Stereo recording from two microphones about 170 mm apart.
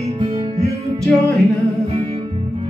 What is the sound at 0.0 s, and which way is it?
Music, 40° right (ahead or behind).